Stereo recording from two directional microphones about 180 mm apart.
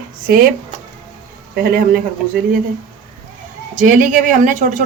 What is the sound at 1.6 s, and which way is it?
Speech, 55° right (ahead or behind).